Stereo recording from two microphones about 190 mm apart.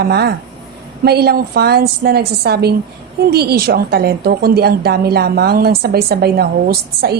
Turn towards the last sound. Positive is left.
turn(degrees=-55)  # may be behind; listen again after turning